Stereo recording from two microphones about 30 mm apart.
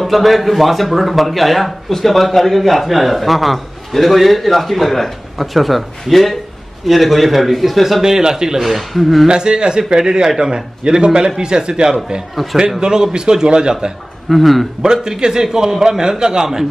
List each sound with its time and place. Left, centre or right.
0.0 s speech: centre
8.0 s a man's voice: right
8.5 s speech: centre
9.3 s a man's voice: right
10.8 s a man's voice: right
14.3 s speech: centre
14.9 s a man's voice: right